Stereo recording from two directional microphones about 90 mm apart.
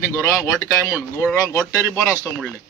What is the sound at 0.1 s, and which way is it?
Speech, 35° left (ahead or behind).